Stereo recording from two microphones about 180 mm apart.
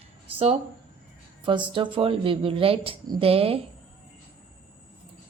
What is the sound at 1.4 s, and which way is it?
Speech, 25° right (ahead or behind).